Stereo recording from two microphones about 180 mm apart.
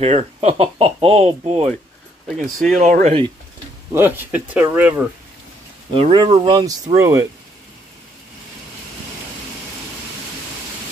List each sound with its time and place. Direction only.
0.0 s speech: 35° right (ahead or behind)
2.2 s speech: centre (ahead or behind)
2.8 s speech: 40° right (ahead or behind)
3.9 s speech: 10° right (ahead or behind)
5.9 s speech: 25° right (ahead or behind)